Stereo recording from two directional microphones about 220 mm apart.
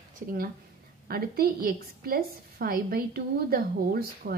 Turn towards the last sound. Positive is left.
turn(degrees=-45)  # may be behind; listen again after turning